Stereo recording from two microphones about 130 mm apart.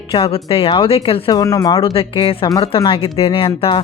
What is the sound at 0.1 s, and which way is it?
Speech, 45° left (ahead or behind).